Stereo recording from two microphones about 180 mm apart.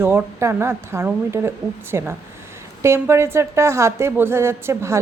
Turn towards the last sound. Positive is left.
turn(degrees=-15)  # may be behind; listen again after turning